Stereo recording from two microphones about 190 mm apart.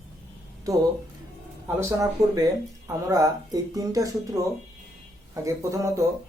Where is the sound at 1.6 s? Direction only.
15° right (ahead or behind).